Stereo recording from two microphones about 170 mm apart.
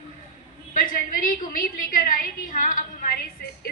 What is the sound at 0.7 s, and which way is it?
A woman's voice, 55° left (ahead or behind).